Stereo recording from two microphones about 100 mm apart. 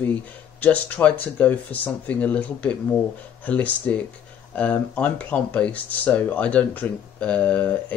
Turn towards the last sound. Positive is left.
turn(degrees=15)  # may be behind; listen again after turning